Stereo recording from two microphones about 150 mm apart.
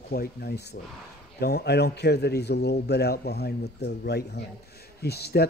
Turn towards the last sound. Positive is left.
turn(degrees=90)